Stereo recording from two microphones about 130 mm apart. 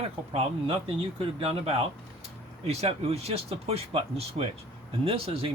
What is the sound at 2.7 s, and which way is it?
Speech, 50° right (ahead or behind).